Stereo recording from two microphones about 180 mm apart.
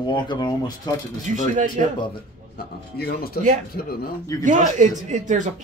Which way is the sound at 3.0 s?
60° left (ahead or behind).